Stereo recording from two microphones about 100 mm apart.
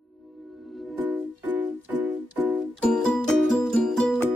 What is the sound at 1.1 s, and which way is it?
Music, 15° right (ahead or behind).